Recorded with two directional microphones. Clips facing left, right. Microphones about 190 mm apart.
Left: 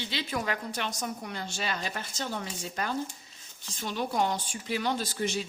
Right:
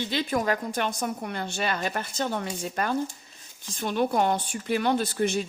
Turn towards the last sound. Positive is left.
turn(degrees=-55)  # may be behind; listen again after turning